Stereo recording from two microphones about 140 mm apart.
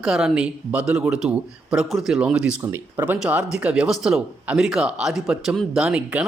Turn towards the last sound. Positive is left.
turn(degrees=-10)  # may be behind; listen again after turning